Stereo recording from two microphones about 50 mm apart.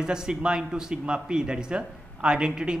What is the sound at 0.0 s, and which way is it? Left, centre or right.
A man's voice, centre.